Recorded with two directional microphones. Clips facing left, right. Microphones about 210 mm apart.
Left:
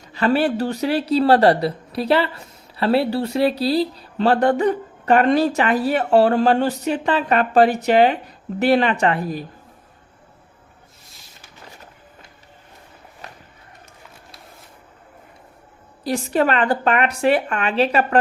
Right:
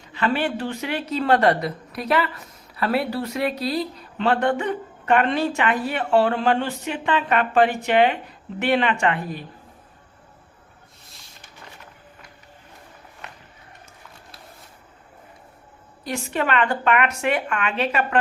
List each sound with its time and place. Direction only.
0.1 s speech: 40° left (ahead or behind)
13.2 s walk: 35° left (ahead or behind)
16.0 s speech: 35° left (ahead or behind)